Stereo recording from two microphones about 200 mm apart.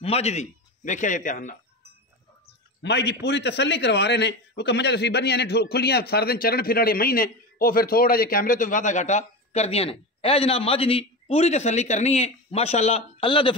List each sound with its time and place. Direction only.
0.0 s speech: 30° left (ahead or behind)
2.8 s a man's voice: 60° left (ahead or behind); by 13.6 s 25° left (ahead or behind)